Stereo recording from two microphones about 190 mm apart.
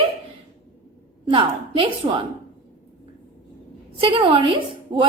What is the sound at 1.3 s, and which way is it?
Speech, 25° right (ahead or behind).